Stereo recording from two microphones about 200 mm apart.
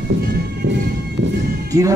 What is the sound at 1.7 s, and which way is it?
Speech, 15° right (ahead or behind).